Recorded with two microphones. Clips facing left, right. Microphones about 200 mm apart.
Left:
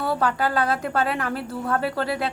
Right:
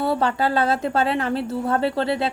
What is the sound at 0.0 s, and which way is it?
A woman's voice, 25° right (ahead or behind).